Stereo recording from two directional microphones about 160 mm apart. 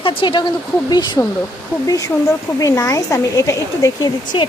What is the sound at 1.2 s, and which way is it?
A woman's voice, 15° left (ahead or behind).